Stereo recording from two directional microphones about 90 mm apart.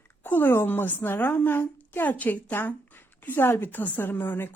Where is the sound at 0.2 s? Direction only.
20° left (ahead or behind).